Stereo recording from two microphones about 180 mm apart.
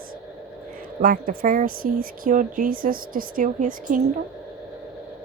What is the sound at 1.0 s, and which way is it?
A woman's voice, 50° right (ahead or behind).